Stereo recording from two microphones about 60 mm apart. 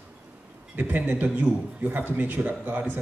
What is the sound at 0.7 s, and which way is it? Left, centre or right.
A man's voice, right.